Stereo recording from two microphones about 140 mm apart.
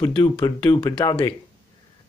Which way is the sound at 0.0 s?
30° left (ahead or behind).